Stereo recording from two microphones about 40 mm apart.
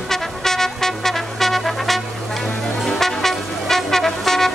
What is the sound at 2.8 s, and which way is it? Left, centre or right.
Brass instrument, centre.